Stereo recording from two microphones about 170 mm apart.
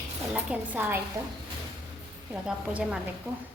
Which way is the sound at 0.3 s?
10° right (ahead or behind).